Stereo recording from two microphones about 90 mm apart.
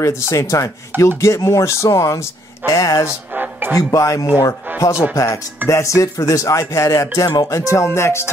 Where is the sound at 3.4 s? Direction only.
20° right (ahead or behind).